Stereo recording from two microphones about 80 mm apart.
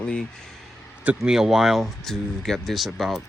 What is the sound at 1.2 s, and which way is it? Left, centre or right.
Speech, centre.